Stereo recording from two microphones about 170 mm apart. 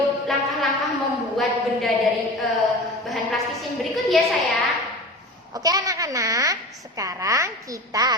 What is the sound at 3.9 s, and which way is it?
Speech, centre (ahead or behind).